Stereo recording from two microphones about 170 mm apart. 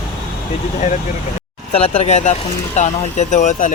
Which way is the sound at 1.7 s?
35° left (ahead or behind).